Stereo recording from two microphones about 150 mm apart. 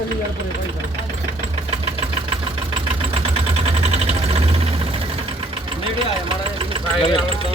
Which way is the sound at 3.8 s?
45° right (ahead or behind).